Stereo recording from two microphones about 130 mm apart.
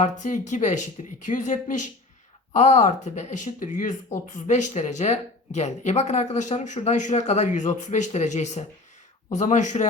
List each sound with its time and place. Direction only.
0.0 s speech: 70° left (ahead or behind)